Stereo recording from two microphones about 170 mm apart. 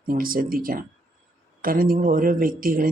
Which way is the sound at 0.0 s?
55° right (ahead or behind).